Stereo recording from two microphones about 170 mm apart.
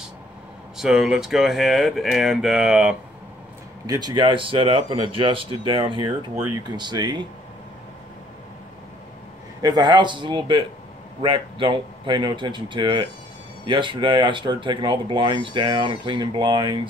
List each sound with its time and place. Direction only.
0.7 s speech: 5° right (ahead or behind)
3.8 s speech: 25° right (ahead or behind)
9.6 s speech: 25° right (ahead or behind)